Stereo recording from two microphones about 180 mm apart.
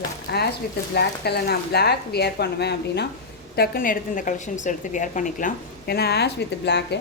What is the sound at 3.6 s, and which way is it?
A woman's voice, 55° left (ahead or behind).